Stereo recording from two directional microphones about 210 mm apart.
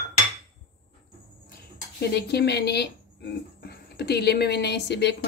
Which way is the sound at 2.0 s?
50° left (ahead or behind).